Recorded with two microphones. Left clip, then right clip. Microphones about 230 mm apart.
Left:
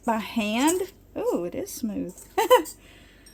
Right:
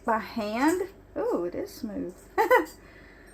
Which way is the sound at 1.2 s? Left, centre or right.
Left.